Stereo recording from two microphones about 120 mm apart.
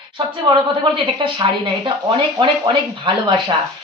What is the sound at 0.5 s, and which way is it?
Speech, 40° right (ahead or behind).